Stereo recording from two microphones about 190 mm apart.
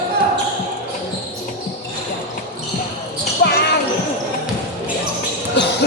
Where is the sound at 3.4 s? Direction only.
60° left (ahead or behind).